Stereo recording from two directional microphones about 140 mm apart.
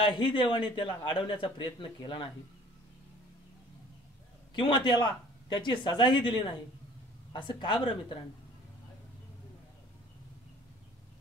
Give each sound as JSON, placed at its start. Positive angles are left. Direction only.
{"t": 0.0, "sound": "a man's voice", "side_deg": 35}
{"t": 4.6, "sound": "a man's voice", "side_deg": 35}
{"t": 7.3, "sound": "a man's voice", "side_deg": 35}